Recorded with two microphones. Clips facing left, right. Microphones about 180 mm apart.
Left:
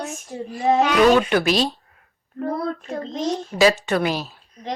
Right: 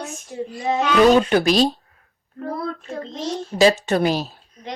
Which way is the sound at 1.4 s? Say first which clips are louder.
Right 3 dB; 40° right (ahead or behind).